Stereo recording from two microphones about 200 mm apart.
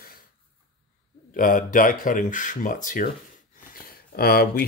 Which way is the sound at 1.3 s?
40° left (ahead or behind).